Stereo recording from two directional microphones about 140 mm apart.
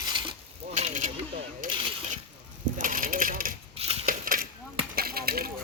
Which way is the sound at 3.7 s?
45° right (ahead or behind).